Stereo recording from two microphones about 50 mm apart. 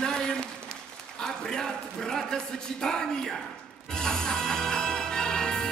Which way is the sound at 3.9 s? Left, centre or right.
Centre.